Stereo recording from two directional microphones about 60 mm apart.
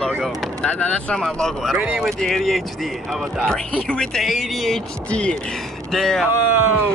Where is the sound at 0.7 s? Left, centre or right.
Left.